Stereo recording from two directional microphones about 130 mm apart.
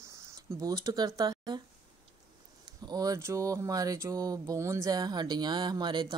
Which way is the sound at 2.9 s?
30° right (ahead or behind).